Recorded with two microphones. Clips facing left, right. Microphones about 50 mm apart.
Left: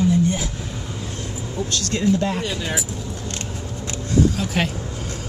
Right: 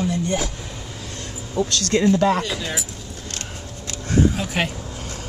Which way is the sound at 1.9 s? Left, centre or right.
Right.